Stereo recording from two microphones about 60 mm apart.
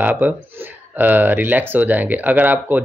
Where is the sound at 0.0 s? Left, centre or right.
Right.